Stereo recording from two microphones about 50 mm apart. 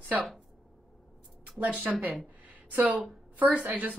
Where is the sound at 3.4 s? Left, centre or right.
Right.